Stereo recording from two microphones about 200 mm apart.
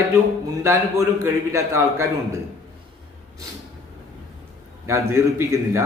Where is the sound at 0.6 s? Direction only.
15° right (ahead or behind).